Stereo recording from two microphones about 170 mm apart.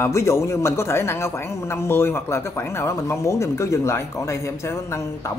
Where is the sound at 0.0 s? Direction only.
15° left (ahead or behind).